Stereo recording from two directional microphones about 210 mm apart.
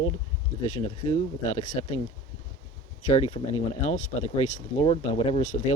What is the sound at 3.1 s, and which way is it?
Speech, 30° left (ahead or behind).